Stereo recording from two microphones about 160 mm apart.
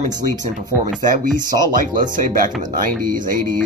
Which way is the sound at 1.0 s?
55° right (ahead or behind).